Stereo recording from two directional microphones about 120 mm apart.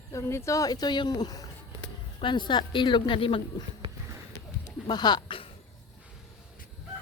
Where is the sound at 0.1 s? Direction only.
25° left (ahead or behind); by 3.4 s 45° left (ahead or behind).